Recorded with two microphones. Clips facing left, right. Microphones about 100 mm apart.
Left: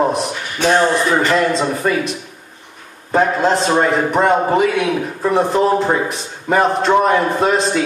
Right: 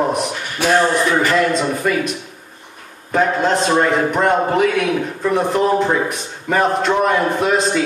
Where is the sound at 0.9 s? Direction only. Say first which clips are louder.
Left 1 dB; 5° left (ahead or behind).